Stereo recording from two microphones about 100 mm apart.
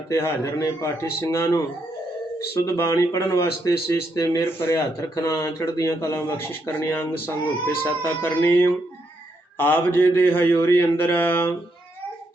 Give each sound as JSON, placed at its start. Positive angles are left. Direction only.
{"t": 0.1, "sound": "speech", "side_deg": 30}
{"t": 2.6, "sound": "speech", "side_deg": 30}